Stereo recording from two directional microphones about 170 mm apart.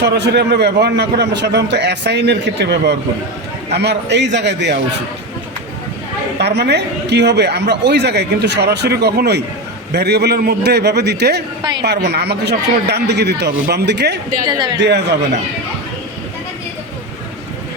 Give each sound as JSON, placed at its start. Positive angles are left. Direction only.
{"t": 0.0, "sound": "a woman's voice", "side_deg": -80}
{"t": 6.4, "sound": "a woman's voice", "side_deg": -75}
{"t": 14.4, "sound": "speech", "side_deg": -25}
{"t": 14.8, "sound": "a woman's voice", "side_deg": -85}